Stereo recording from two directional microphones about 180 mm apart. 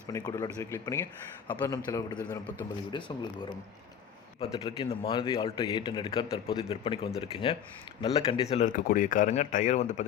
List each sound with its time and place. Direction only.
0.1 s a man's voice: 20° left (ahead or behind)
4.6 s a man's voice: 30° left (ahead or behind)
6.7 s speech: 30° left (ahead or behind)